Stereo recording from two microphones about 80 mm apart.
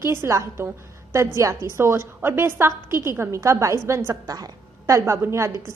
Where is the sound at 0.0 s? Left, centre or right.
Right.